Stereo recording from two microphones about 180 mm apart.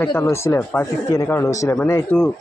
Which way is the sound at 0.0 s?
15° left (ahead or behind).